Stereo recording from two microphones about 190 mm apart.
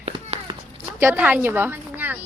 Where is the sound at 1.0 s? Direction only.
10° right (ahead or behind).